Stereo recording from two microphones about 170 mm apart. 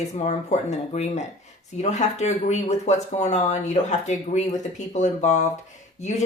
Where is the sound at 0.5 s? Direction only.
40° left (ahead or behind).